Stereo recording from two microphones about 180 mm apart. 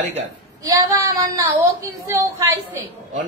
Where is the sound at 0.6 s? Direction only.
20° right (ahead or behind).